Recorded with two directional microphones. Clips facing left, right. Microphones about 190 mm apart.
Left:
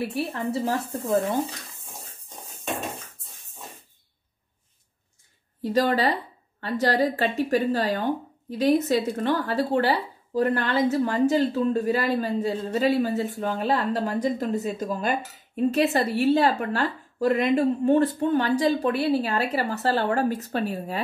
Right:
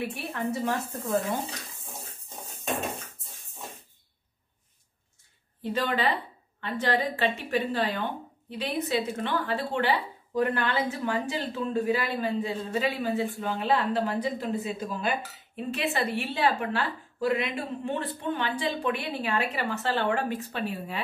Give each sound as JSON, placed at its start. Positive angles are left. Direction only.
{"t": 0.1, "sound": "a woman's voice", "side_deg": 30}
{"t": 5.6, "sound": "a woman's voice", "side_deg": 40}